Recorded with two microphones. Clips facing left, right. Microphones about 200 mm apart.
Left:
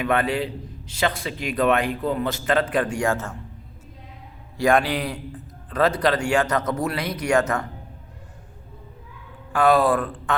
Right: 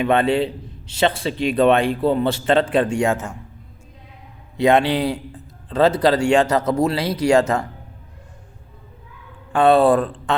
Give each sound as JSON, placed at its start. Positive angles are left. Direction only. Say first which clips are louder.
{"t": 0.0, "sound": "a man's voice", "louder": "right 5 dB", "side_deg": -25}
{"t": 4.5, "sound": "a man's voice", "louder": "right 4 dB", "side_deg": -25}
{"t": 9.5, "sound": "a man's voice", "louder": "right 4 dB", "side_deg": -30}